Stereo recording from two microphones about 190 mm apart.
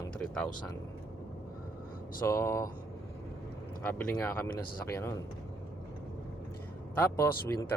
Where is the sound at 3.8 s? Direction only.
10° left (ahead or behind).